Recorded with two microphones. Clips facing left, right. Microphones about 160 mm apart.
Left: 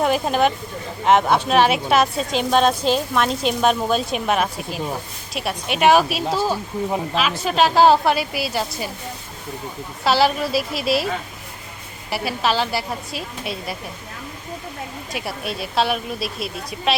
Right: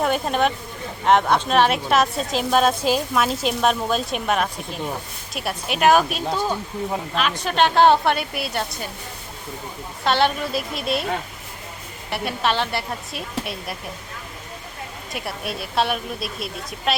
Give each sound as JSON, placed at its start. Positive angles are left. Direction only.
{"t": 0.0, "sound": "a woman's voice", "side_deg": 0}
{"t": 10.0, "sound": "a woman's voice", "side_deg": 5}
{"t": 12.1, "sound": "a woman's voice", "side_deg": 0}
{"t": 15.1, "sound": "a woman's voice", "side_deg": 0}